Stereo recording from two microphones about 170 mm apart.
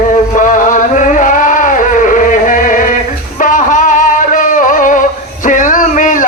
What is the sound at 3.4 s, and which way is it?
Music, 50° left (ahead or behind).